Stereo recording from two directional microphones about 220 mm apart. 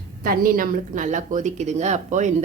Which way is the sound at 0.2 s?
40° right (ahead or behind).